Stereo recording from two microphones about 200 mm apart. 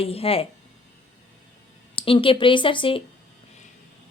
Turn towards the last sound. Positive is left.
turn(degrees=25)  # may be behind; listen again after turning